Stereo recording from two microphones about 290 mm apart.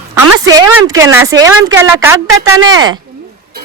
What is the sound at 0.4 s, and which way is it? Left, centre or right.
A woman's voice, centre.